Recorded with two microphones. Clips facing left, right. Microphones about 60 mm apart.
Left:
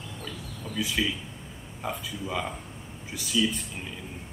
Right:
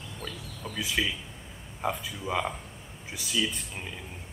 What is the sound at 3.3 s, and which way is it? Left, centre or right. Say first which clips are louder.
Speech: left 4 dB; right.